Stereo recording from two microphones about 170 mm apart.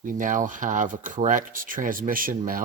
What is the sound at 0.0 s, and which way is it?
Speech, 50° right (ahead or behind).